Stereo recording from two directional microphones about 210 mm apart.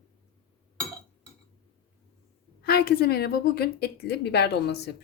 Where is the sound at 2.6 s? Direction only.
45° left (ahead or behind).